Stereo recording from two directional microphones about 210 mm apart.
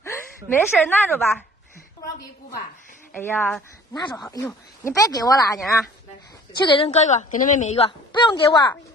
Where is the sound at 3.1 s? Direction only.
10° left (ahead or behind).